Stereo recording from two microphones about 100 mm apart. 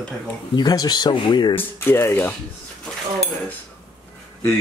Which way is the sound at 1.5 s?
25° left (ahead or behind).